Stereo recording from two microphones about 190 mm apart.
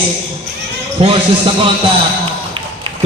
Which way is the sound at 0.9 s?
25° right (ahead or behind).